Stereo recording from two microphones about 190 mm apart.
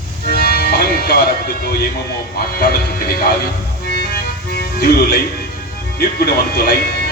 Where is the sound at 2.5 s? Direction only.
55° left (ahead or behind).